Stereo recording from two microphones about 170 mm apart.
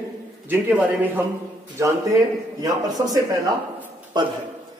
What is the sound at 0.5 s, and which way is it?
Speech, 10° right (ahead or behind).